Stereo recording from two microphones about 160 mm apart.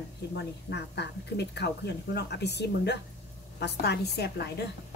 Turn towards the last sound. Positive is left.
turn(degrees=85)